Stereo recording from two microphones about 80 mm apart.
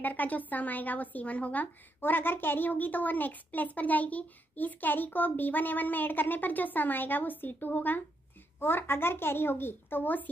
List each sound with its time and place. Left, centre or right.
0.0 s a woman's voice: left